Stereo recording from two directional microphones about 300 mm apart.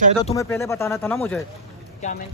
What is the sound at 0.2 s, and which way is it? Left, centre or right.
Speech, centre.